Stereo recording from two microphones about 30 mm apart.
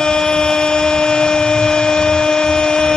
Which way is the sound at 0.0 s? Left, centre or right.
Left.